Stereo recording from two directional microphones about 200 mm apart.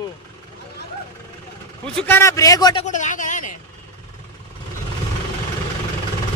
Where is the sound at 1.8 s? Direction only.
5° left (ahead or behind).